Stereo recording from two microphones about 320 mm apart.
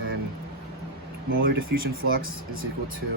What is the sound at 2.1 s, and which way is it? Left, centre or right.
Speech, right.